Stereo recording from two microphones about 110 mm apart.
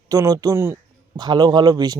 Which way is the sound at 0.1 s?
35° right (ahead or behind).